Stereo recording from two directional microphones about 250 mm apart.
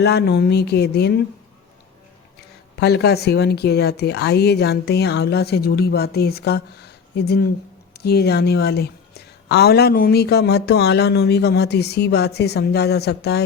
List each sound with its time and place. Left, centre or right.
0.0 s a woman's voice: left
2.7 s a woman's voice: left